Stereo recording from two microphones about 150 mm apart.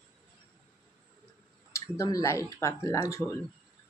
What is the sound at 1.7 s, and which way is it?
Speech, 20° left (ahead or behind).